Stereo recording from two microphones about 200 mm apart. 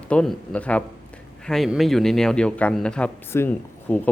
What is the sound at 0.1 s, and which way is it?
A man's voice, 5° left (ahead or behind).